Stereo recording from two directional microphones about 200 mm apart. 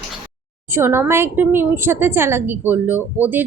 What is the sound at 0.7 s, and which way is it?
A woman's voice, 10° right (ahead or behind).